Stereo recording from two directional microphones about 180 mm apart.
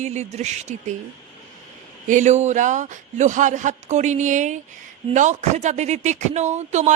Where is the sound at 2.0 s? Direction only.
40° right (ahead or behind).